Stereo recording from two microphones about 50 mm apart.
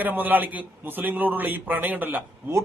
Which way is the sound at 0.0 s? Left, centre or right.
Right.